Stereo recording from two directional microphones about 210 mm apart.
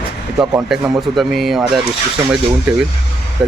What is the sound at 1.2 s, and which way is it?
Speech, centre (ahead or behind).